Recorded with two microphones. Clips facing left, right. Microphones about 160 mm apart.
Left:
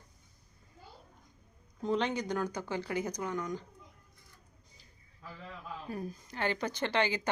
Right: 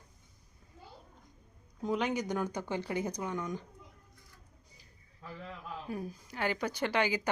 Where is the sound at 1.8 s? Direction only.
10° right (ahead or behind).